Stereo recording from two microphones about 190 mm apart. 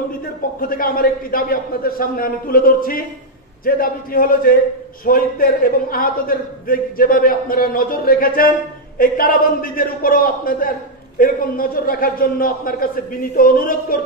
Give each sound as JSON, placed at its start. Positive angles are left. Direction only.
{"t": 0.6, "sound": "a man's voice", "side_deg": 50}